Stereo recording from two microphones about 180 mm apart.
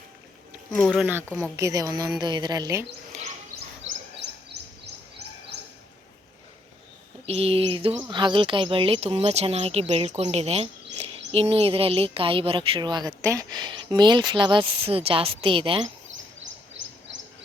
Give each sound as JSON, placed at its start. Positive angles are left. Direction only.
{"t": 1.4, "sound": "speech", "side_deg": -15}
{"t": 3.9, "sound": "chirp", "side_deg": -90}
{"t": 7.3, "sound": "speech", "side_deg": -35}
{"t": 16.8, "sound": "wild animals", "side_deg": -90}